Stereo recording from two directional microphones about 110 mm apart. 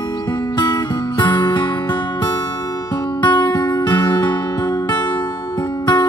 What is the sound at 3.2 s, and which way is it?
Music, 40° left (ahead or behind).